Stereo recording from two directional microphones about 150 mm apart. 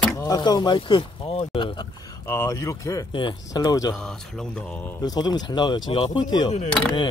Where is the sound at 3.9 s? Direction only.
5° left (ahead or behind).